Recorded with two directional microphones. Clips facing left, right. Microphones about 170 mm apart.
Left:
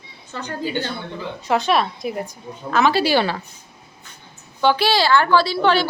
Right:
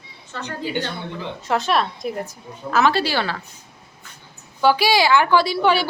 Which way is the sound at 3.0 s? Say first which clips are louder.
Left 5 dB; 15° left (ahead or behind).